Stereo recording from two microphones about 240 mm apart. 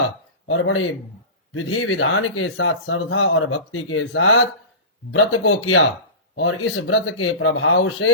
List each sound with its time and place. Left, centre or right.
0.4 s speech: left